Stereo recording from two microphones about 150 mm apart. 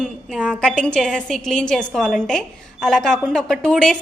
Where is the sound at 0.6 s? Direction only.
5° left (ahead or behind).